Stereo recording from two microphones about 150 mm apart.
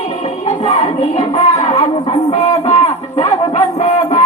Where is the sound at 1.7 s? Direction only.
30° left (ahead or behind).